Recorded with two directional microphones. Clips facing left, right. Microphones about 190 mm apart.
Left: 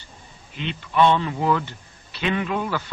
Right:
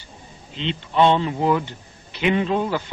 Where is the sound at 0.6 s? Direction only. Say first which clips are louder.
Right 1 dB; 20° right (ahead or behind).